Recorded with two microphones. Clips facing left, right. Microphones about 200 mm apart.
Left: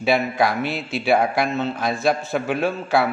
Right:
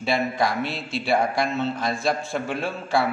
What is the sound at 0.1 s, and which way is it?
Speech, 60° left (ahead or behind).